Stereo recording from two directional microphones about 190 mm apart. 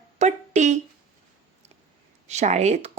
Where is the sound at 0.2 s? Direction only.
40° right (ahead or behind).